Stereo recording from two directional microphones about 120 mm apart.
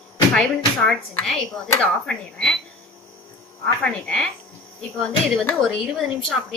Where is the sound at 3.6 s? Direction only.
10° left (ahead or behind).